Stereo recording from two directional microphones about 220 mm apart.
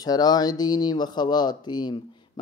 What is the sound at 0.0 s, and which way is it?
Speech, 15° left (ahead or behind).